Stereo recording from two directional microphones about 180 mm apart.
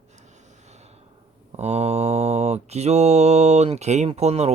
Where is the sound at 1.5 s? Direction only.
35° right (ahead or behind).